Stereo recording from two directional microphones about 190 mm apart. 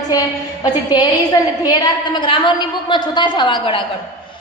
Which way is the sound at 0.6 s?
20° left (ahead or behind).